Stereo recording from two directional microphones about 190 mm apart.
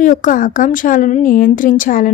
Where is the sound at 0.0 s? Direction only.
45° left (ahead or behind).